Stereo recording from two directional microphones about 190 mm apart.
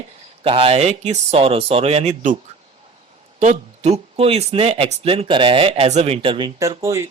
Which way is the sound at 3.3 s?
35° right (ahead or behind).